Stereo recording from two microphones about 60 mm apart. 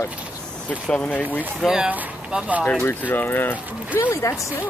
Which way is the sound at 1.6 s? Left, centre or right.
Centre.